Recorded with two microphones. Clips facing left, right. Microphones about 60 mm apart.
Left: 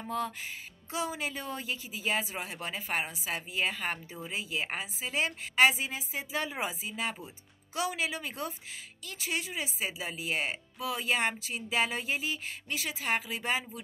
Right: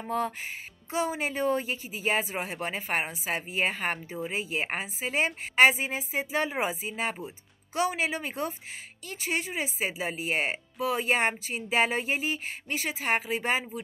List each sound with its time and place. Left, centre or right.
0.1 s speech: right
0.9 s speech: right